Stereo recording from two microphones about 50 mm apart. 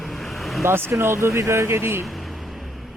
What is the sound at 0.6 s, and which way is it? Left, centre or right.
Speech, right.